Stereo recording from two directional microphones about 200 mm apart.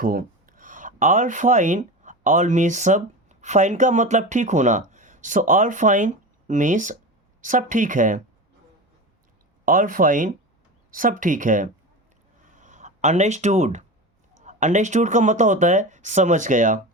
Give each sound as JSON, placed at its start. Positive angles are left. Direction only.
{"t": 0.0, "sound": "speech", "side_deg": -45}
{"t": 9.6, "sound": "speech", "side_deg": -45}
{"t": 12.5, "sound": "a sound", "side_deg": -40}
{"t": 14.4, "sound": "speech", "side_deg": -35}